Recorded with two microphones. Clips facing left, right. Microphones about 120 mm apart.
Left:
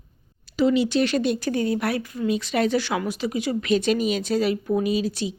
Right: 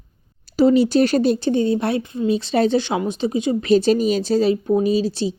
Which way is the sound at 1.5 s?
25° right (ahead or behind).